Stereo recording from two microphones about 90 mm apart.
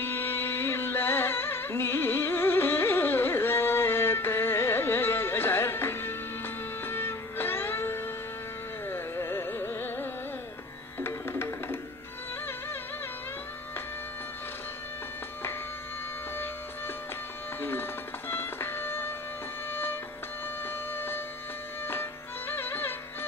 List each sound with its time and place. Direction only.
0.0 s music: 25° left (ahead or behind)
8.8 s carnatic music: 25° left (ahead or behind)
11.0 s music: 25° left (ahead or behind)
17.6 s music: 25° left (ahead or behind)
20.6 s a sound: 25° left (ahead or behind)
22.5 s music: 25° left (ahead or behind)